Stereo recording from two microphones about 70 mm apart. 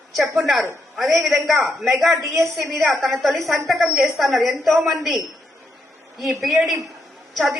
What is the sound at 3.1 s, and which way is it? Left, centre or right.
A woman's voice, centre.